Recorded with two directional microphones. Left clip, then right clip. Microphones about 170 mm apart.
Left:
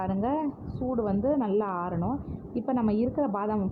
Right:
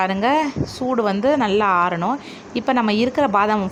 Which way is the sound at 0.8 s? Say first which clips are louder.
Right 9 dB; 60° right (ahead or behind).